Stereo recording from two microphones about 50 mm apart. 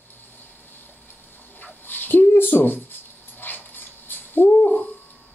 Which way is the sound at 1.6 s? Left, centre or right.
Left.